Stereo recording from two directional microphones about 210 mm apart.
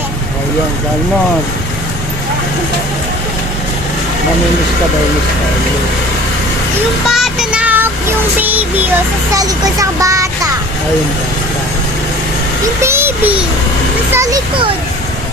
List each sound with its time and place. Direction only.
7.1 s speech: centre (ahead or behind)
12.6 s a child's voice: 10° right (ahead or behind)